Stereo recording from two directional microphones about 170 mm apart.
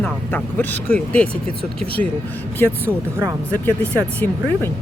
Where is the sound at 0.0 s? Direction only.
10° left (ahead or behind).